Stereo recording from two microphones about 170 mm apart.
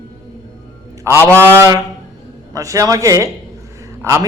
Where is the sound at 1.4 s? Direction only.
15° right (ahead or behind).